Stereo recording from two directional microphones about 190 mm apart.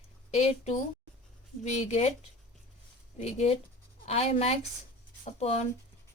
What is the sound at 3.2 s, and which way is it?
Speech, 35° left (ahead or behind).